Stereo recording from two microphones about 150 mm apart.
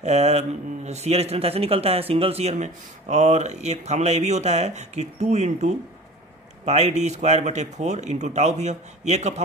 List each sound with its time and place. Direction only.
0.0 s a man's voice: 45° right (ahead or behind)